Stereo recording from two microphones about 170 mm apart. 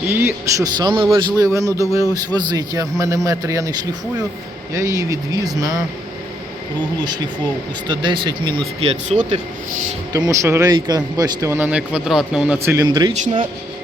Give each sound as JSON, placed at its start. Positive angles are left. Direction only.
{"t": 0.1, "sound": "speech", "side_deg": -15}
{"t": 7.9, "sound": "speech", "side_deg": -25}
{"t": 10.1, "sound": "speech", "side_deg": -20}
{"t": 12.9, "sound": "speech", "side_deg": -25}